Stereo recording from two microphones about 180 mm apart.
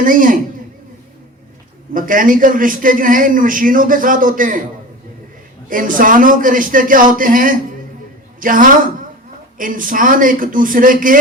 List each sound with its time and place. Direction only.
0.0 s a man's voice: 50° right (ahead or behind)
1.9 s a man's voice: 50° right (ahead or behind)
5.6 s a man's voice: 50° right (ahead or behind)